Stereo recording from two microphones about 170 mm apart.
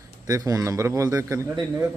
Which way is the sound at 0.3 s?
20° right (ahead or behind).